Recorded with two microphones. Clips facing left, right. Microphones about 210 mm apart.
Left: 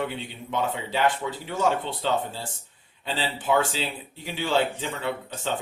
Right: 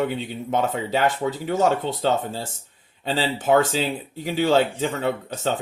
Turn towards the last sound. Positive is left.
turn(degrees=-45)  # may be behind; listen again after turning